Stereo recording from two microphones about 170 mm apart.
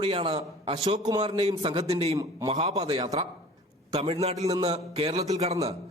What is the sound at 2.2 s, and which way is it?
Speech, 20° right (ahead or behind).